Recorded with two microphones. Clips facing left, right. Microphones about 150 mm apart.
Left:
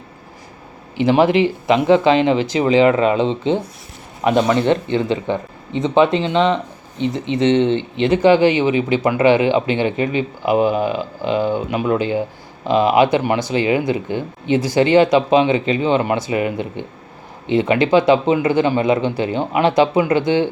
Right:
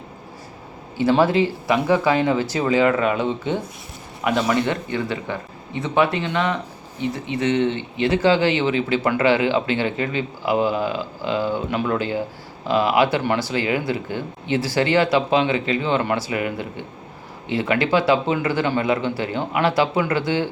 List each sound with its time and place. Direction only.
0.9 s speech: 20° left (ahead or behind)